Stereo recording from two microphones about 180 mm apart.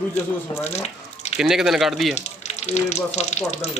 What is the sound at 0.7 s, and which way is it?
Drip, 35° left (ahead or behind).